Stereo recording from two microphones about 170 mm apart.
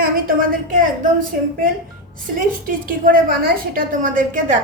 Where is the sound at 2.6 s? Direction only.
55° right (ahead or behind).